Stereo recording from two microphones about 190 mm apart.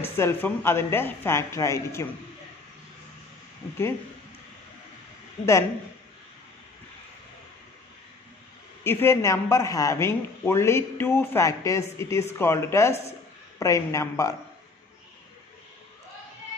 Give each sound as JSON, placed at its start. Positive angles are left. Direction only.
{"t": 0.0, "sound": "a man's voice", "side_deg": 15}
{"t": 5.4, "sound": "a man's voice", "side_deg": 15}
{"t": 8.8, "sound": "a man's voice", "side_deg": 15}